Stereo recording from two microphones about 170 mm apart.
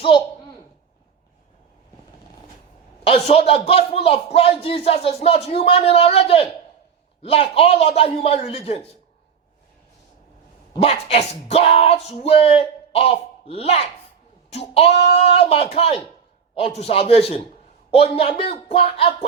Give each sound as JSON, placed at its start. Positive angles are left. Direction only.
{"t": 3.1, "sound": "speech", "side_deg": 35}
{"t": 10.8, "sound": "speech", "side_deg": 35}